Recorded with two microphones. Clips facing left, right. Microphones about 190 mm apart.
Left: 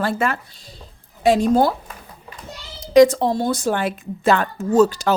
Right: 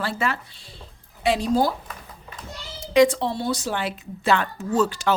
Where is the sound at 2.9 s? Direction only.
40° left (ahead or behind).